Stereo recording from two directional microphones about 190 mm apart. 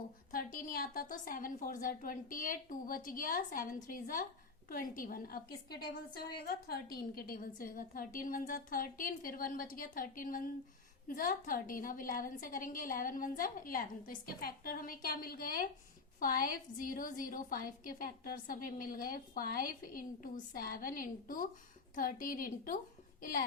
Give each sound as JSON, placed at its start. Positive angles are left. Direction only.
{"t": 0.3, "sound": "a woman's voice", "side_deg": 45}